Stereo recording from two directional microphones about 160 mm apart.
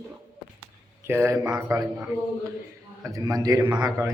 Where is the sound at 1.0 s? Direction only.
15° right (ahead or behind).